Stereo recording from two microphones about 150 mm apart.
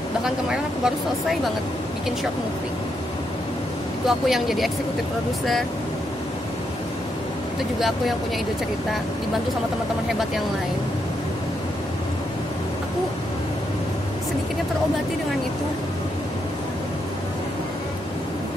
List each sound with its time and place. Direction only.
0.2 s speech: 5° right (ahead or behind)
4.3 s speech: centre (ahead or behind)
7.8 s speech: centre (ahead or behind)